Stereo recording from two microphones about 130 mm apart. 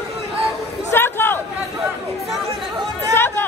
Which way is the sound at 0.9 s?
15° left (ahead or behind).